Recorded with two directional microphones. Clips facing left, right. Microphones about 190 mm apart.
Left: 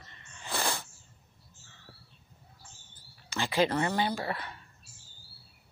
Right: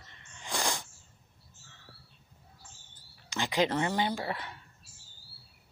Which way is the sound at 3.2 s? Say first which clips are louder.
Left 1 dB; 15° right (ahead or behind).